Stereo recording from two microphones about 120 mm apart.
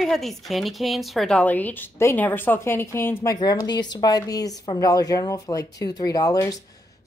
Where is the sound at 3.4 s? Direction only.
35° left (ahead or behind).